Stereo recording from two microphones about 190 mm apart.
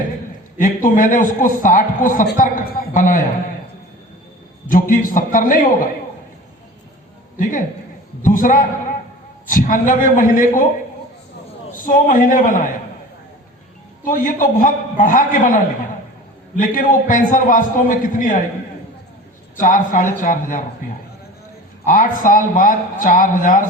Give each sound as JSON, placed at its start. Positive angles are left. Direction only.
{"t": 0.6, "sound": "speech", "side_deg": 45}
{"t": 4.7, "sound": "speech", "side_deg": 45}
{"t": 7.3, "sound": "a man's voice", "side_deg": 45}
{"t": 11.9, "sound": "speech", "side_deg": 45}
{"t": 14.0, "sound": "speech", "side_deg": 45}
{"t": 19.5, "sound": "speech", "side_deg": 45}